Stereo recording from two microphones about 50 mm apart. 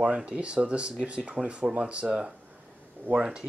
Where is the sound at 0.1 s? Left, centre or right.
Right.